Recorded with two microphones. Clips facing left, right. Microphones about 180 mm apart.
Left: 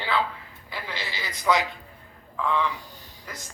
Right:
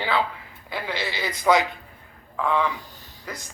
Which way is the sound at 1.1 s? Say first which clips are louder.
Right 6 dB; 25° right (ahead or behind).